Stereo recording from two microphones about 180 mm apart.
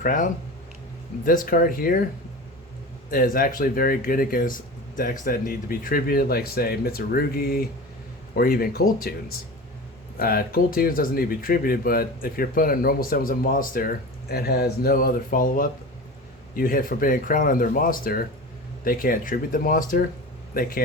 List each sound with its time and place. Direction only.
0.0 s speech: 45° left (ahead or behind)
3.1 s speech: 50° left (ahead or behind)
10.2 s speech: 55° left (ahead or behind)